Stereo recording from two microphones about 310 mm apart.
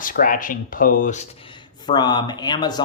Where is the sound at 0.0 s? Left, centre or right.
Left.